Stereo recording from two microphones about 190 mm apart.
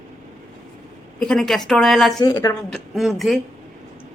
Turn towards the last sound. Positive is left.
turn(degrees=0)  # may be behind; listen again after turning